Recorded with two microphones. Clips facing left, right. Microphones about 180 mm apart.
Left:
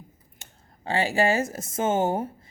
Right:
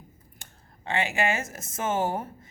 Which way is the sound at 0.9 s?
35° left (ahead or behind).